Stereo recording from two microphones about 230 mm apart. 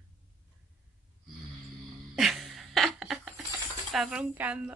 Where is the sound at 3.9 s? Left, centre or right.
Centre.